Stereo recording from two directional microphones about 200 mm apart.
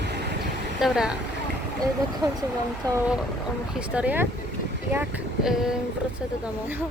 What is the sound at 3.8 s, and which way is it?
Speech, 5° right (ahead or behind).